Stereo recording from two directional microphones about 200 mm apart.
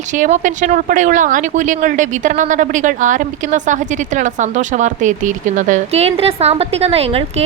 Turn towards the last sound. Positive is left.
turn(degrees=-30)  # may be behind; listen again after turning